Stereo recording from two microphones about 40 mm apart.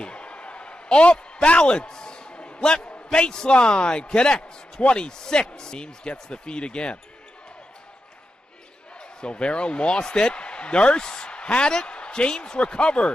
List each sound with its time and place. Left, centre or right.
0.0 s a sound: left
3.1 s speech: centre
9.2 s speech: left